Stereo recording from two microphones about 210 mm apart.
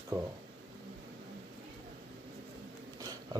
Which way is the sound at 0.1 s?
15° right (ahead or behind).